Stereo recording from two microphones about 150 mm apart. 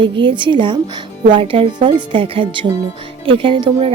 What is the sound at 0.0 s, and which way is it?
A woman's voice, 30° right (ahead or behind).